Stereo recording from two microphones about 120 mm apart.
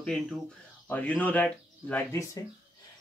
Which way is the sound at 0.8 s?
10° left (ahead or behind).